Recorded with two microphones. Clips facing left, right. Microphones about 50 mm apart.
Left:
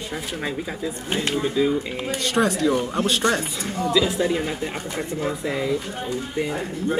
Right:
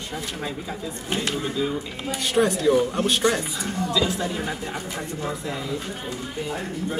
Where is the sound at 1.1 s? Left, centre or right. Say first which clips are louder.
Left 3 dB; centre.